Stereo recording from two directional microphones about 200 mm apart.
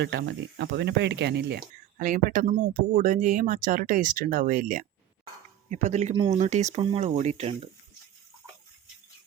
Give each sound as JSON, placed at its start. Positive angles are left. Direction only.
{"t": 0.0, "sound": "speech", "side_deg": -60}